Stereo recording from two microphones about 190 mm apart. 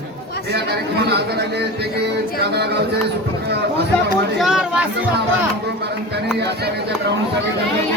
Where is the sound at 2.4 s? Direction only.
60° right (ahead or behind).